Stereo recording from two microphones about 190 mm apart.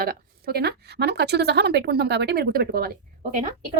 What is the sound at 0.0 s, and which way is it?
Speech, 55° right (ahead or behind).